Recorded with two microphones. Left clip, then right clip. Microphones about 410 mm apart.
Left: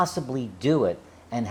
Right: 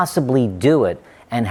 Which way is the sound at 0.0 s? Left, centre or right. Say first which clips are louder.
Right 9 dB; right.